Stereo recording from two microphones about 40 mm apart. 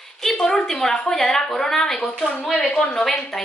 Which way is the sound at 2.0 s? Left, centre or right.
Left.